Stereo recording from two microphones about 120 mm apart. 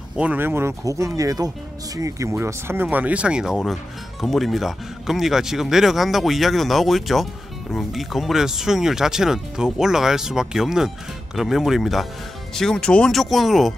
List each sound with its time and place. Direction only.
0.2 s speech: 15° right (ahead or behind); by 13.7 s centre (ahead or behind)